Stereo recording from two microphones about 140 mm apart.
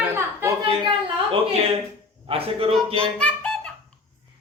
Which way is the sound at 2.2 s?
40° right (ahead or behind).